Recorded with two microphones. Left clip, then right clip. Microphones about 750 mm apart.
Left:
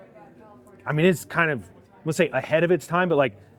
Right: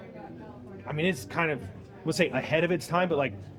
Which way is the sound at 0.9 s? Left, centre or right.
Left.